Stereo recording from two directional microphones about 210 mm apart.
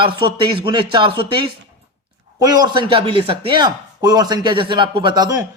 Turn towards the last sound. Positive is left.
turn(degrees=-20)  # may be behind; listen again after turning